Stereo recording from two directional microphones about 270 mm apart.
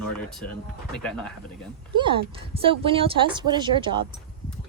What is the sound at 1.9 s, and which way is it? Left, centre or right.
Speech, centre.